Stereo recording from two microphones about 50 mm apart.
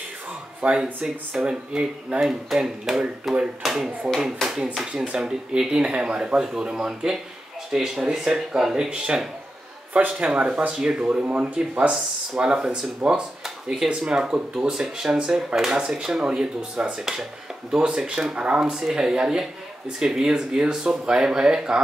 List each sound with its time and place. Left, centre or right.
0.6 s speech: right; by 3.9 s centre
4.4 s speech: centre
5.0 s speech: centre
13.4 s a sound: centre
13.9 s speech: centre